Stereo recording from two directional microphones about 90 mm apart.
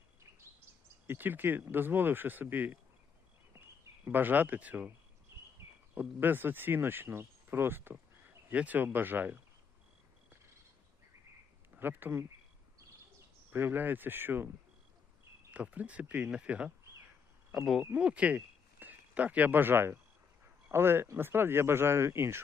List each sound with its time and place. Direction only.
1.0 s speech: 20° right (ahead or behind)
4.0 s speech: 20° right (ahead or behind)
5.3 s a sound: 30° right (ahead or behind)
5.9 s speech: 20° right (ahead or behind)
11.7 s speech: 20° right (ahead or behind)
13.5 s speech: 25° right (ahead or behind)
15.5 s speech: 15° right (ahead or behind)